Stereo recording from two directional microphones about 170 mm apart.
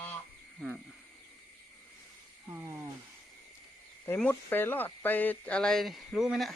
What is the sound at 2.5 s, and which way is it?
Speech, 15° right (ahead or behind).